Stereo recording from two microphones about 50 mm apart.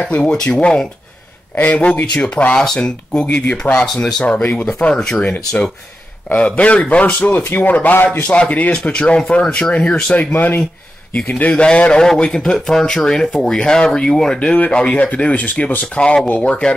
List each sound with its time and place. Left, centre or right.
0.0 s speech: left
2.5 s speech: centre; by 3.8 s left
3.8 s speech: centre
4.2 s speech: left
4.6 s speech: left
6.3 s speech: left
10.1 s speech: left